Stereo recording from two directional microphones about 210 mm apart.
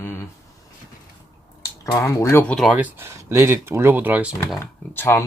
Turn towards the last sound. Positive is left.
turn(degrees=10)  # may be behind; listen again after turning